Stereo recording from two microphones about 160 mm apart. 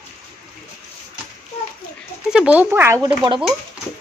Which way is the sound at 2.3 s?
5° right (ahead or behind).